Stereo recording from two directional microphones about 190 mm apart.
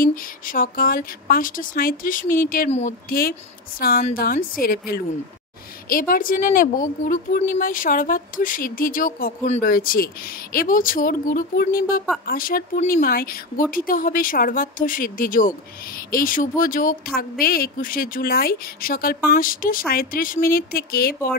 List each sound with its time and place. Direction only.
0.0 s a woman's voice: 50° left (ahead or behind)